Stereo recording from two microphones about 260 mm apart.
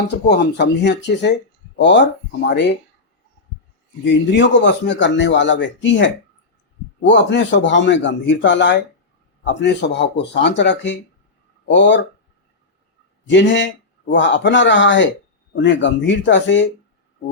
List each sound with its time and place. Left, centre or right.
0.3 s speech: left
4.0 s speech: left
7.1 s speech: left
13.2 s speech: left